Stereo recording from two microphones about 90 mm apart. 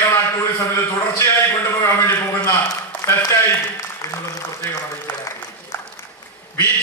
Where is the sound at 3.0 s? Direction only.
35° left (ahead or behind).